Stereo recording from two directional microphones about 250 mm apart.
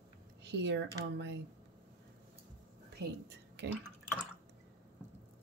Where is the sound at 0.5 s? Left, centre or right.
Right.